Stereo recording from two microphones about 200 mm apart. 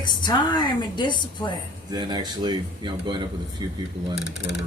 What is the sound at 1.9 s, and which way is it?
Speech, 20° right (ahead or behind).